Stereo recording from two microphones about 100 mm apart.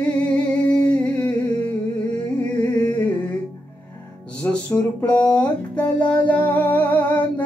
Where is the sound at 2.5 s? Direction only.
15° left (ahead or behind).